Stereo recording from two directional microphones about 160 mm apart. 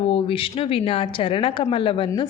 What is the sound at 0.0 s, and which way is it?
A woman's voice, 35° left (ahead or behind).